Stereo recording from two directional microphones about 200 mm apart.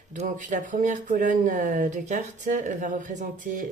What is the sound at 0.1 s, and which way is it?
Speech, 40° right (ahead or behind).